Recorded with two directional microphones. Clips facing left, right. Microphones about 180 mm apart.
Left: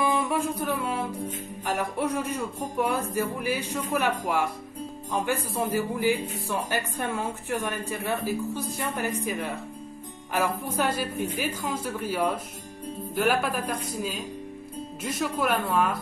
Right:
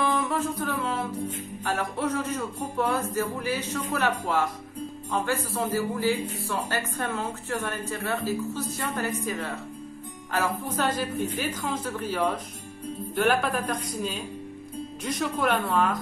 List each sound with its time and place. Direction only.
0.0 s music: 10° left (ahead or behind)